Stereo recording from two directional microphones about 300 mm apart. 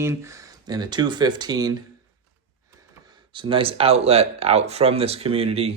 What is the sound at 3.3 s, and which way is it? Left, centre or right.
Speech, centre.